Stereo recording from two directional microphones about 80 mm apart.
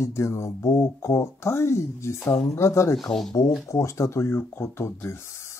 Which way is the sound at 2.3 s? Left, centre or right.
Left.